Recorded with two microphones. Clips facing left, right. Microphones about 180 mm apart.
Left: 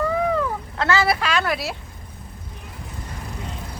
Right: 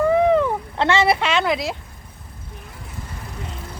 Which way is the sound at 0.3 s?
25° right (ahead or behind).